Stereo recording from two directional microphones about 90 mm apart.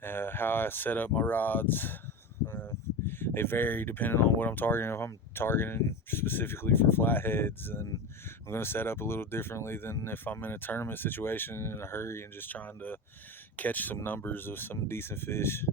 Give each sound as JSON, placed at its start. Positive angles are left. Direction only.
{"t": 0.0, "sound": "speech", "side_deg": 25}